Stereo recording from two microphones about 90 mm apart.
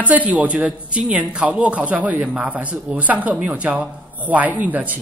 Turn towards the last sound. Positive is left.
turn(degrees=-20)  # may be behind; listen again after turning